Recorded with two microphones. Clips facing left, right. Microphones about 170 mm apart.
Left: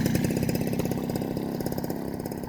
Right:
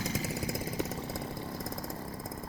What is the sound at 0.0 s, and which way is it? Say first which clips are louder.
Chainsaw: left 10 dB; 65° left (ahead or behind).